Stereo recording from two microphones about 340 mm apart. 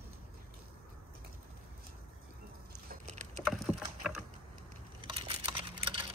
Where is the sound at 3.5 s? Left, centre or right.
Centre.